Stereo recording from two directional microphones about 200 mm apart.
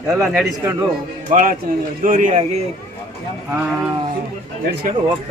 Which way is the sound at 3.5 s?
10° right (ahead or behind).